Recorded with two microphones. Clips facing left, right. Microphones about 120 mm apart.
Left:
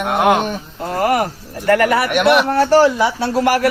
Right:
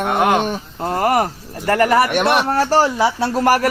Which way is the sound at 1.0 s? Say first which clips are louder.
Left 1 dB; 35° right (ahead or behind).